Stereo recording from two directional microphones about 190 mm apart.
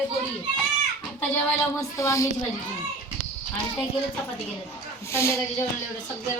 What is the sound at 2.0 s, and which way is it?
Speech, 15° left (ahead or behind).